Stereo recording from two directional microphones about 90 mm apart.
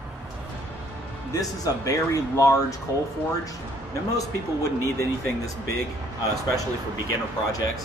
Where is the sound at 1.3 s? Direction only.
40° left (ahead or behind).